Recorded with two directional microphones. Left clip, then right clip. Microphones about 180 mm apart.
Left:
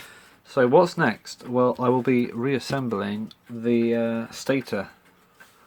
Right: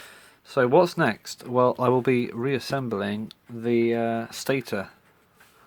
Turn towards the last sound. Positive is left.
turn(degrees=-35)  # may be behind; listen again after turning